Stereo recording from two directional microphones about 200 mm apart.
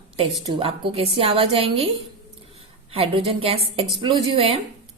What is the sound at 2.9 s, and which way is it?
A woman's voice, 25° right (ahead or behind).